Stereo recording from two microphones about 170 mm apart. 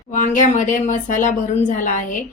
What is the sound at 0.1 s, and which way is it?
Speech, 50° left (ahead or behind).